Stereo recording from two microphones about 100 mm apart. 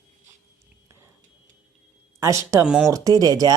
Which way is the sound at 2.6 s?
5° right (ahead or behind).